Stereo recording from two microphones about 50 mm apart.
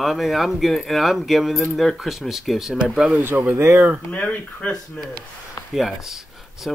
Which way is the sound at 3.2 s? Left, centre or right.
Right.